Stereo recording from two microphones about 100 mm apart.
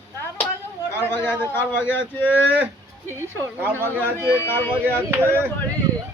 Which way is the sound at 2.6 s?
25° right (ahead or behind).